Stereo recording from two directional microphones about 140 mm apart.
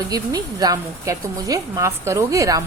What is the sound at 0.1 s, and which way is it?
A woman's voice, 25° right (ahead or behind).